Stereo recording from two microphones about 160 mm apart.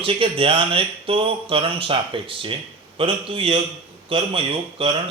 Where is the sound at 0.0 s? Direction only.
35° right (ahead or behind).